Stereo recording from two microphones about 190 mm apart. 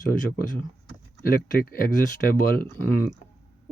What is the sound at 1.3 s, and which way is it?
Speech, 50° left (ahead or behind).